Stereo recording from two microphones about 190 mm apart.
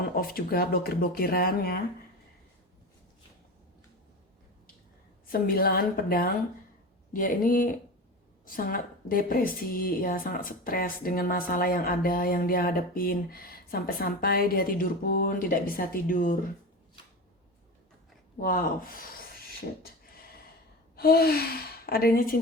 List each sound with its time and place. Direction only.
0.2 s a woman's voice: 50° left (ahead or behind)
5.3 s a woman's voice: 50° left (ahead or behind)
18.3 s a sound: 45° left (ahead or behind)
20.9 s gasp: 55° left (ahead or behind)
21.8 s a woman's voice: 55° left (ahead or behind)